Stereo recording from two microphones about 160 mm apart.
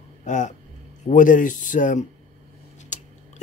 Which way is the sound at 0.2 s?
50° left (ahead or behind).